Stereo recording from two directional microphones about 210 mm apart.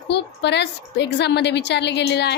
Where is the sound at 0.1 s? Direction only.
55° left (ahead or behind).